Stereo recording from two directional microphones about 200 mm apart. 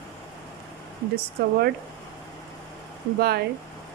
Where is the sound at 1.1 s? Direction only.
50° right (ahead or behind).